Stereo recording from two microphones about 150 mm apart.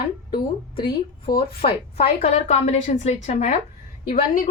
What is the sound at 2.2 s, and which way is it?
A woman's voice, 45° left (ahead or behind).